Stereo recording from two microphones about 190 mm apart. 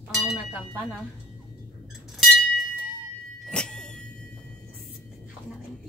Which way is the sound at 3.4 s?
5° left (ahead or behind).